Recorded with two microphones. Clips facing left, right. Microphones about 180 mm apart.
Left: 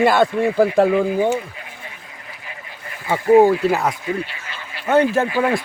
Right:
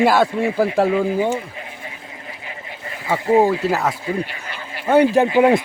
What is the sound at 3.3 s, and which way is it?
Speech, centre (ahead or behind).